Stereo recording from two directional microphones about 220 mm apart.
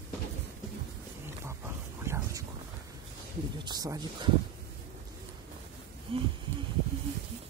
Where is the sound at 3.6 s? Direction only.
15° right (ahead or behind).